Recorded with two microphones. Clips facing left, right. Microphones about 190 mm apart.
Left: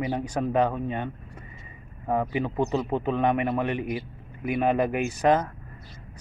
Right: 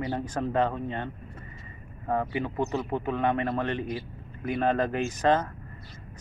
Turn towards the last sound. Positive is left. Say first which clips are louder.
# left 2 dB
turn(degrees=10)  # may be behind; listen again after turning